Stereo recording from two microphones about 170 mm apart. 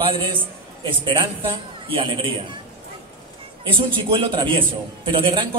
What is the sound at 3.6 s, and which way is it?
A man's voice, 30° right (ahead or behind).